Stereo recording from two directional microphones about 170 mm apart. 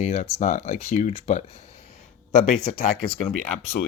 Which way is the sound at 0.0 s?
40° left (ahead or behind).